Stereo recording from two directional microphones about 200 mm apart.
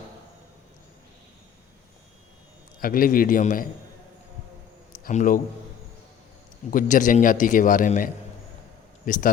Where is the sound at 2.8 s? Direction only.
45° left (ahead or behind).